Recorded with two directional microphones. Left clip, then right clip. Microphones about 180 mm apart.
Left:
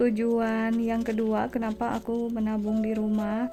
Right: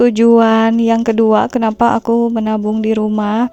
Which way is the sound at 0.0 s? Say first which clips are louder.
Right 15 dB; 50° right (ahead or behind).